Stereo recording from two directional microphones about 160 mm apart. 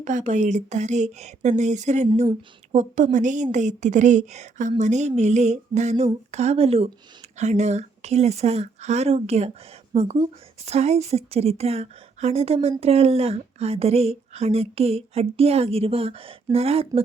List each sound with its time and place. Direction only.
0.0 s a woman's voice: 50° right (ahead or behind)